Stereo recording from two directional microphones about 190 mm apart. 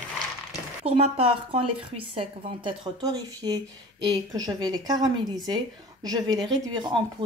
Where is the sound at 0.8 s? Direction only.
30° right (ahead or behind).